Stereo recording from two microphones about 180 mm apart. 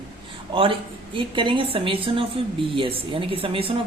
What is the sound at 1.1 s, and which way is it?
A woman's voice, 30° right (ahead or behind).